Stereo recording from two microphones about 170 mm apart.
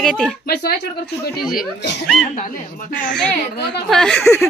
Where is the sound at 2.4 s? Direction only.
50° left (ahead or behind).